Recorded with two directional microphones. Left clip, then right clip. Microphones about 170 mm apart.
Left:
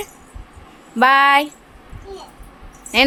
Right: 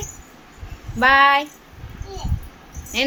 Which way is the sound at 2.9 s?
30° left (ahead or behind).